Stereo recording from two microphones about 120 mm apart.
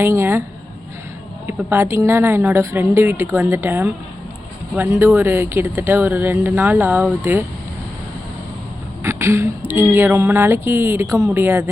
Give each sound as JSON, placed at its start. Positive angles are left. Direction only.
{"t": 0.0, "sound": "speech", "side_deg": -20}
{"t": 1.5, "sound": "speech", "side_deg": -20}
{"t": 9.0, "sound": "speech", "side_deg": -25}